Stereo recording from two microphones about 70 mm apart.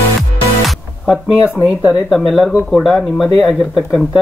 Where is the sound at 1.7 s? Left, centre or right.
Centre.